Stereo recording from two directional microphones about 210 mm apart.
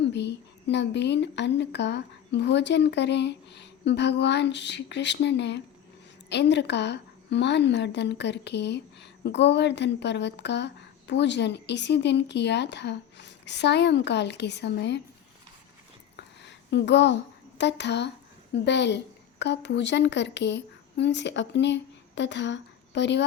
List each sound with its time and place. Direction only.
0.1 s a woman's voice: 55° left (ahead or behind)
16.7 s a woman's voice: 55° left (ahead or behind)